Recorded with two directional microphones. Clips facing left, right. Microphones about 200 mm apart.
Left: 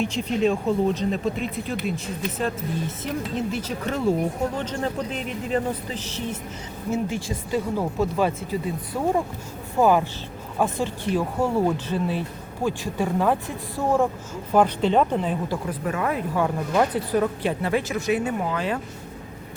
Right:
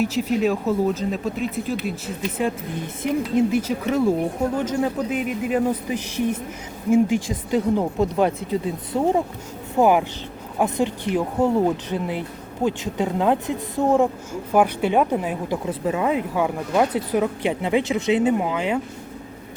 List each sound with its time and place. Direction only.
0.0 s speech: 5° right (ahead or behind)
2.4 s a woman's voice: 10° right (ahead or behind)
15.6 s a woman's voice: 25° right (ahead or behind)